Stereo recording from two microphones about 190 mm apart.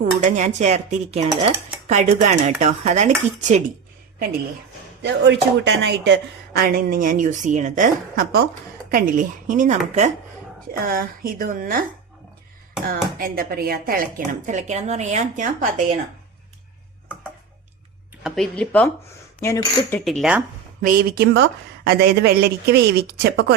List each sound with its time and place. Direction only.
0.0 s dishes: 40° right (ahead or behind)
5.0 s speech: 70° right (ahead or behind)
6.6 s a woman's voice: 50° right (ahead or behind)
10.7 s a woman's voice: 50° right (ahead or behind)
12.8 s a woman's voice: 50° right (ahead or behind)
14.4 s dishes: 40° right (ahead or behind)
18.2 s speech: centre (ahead or behind)
20.1 s speech: centre (ahead or behind)
20.8 s speech: 55° right (ahead or behind)